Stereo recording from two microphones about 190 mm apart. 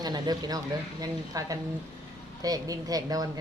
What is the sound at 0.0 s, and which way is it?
A woman's voice, 20° right (ahead or behind).